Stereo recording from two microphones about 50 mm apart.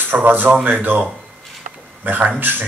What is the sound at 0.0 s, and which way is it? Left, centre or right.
Speech, right.